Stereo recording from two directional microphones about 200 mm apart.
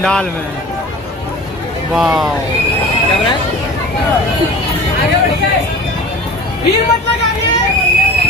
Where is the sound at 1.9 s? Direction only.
Centre (ahead or behind).